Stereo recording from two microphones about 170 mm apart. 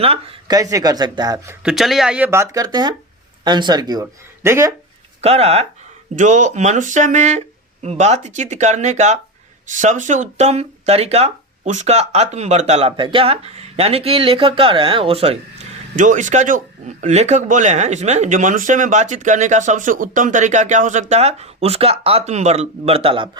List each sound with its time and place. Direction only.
0.0 s speech: 35° right (ahead or behind)
1.6 s speech: centre (ahead or behind); by 4.7 s 15° right (ahead or behind)
5.2 s speech: 35° right (ahead or behind)